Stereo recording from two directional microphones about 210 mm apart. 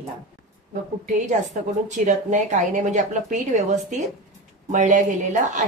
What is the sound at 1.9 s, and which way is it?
A woman's voice, 35° right (ahead or behind).